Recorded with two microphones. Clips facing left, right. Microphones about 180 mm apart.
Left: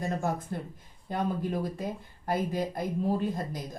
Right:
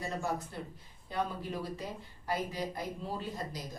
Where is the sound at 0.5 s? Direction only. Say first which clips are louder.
Left 6 dB; 50° left (ahead or behind).